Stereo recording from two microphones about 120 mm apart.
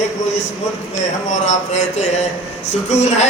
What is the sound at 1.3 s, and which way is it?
Speech, 75° left (ahead or behind).